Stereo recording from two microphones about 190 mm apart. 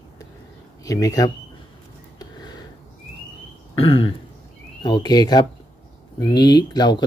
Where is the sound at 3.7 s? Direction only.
30° left (ahead or behind).